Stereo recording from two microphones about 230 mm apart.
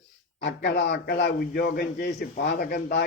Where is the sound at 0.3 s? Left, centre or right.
Left.